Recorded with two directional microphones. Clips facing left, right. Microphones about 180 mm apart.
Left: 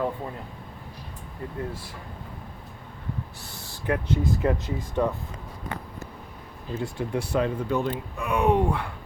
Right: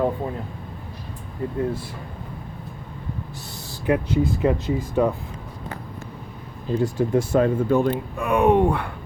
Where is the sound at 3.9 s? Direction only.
10° right (ahead or behind).